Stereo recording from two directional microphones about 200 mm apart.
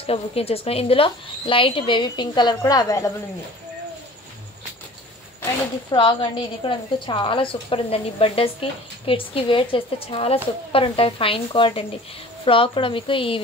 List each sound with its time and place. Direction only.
0.0 s a woman's voice: 30° left (ahead or behind)
5.4 s a woman's voice: 20° left (ahead or behind)